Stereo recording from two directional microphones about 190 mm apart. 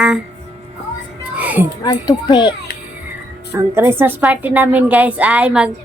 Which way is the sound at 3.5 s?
15° right (ahead or behind).